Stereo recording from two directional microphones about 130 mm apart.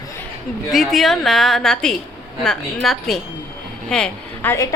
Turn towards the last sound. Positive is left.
turn(degrees=5)  # may be behind; listen again after turning